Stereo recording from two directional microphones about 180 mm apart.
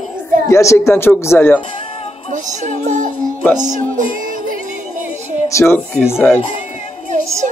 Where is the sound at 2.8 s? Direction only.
45° right (ahead or behind).